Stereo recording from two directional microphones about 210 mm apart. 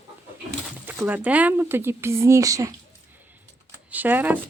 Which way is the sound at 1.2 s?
5° right (ahead or behind).